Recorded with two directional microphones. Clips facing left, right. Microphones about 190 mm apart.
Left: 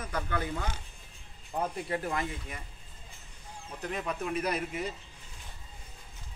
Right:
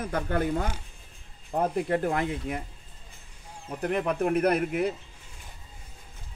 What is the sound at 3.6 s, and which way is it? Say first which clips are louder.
Speech: right 8 dB; 60° right (ahead or behind).